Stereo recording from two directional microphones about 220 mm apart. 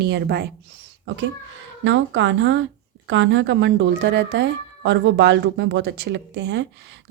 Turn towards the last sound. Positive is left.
turn(degrees=-50)  # may be behind; listen again after turning